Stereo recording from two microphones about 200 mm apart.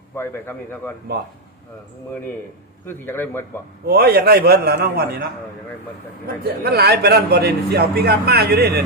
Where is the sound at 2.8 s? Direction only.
10° left (ahead or behind).